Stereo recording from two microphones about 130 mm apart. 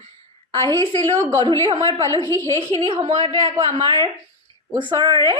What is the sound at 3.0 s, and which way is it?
Speech, 55° right (ahead or behind).